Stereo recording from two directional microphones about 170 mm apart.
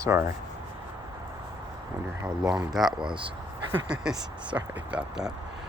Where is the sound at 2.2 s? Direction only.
5° right (ahead or behind).